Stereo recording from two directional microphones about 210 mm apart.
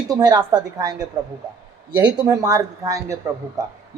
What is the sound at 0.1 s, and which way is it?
Speech, 20° right (ahead or behind).